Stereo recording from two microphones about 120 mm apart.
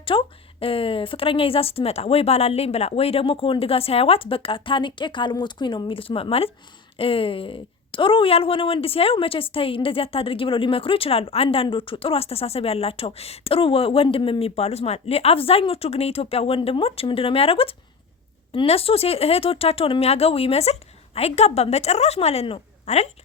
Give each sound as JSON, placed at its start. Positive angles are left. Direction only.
{"t": 0.0, "sound": "a woman's voice", "side_deg": 50}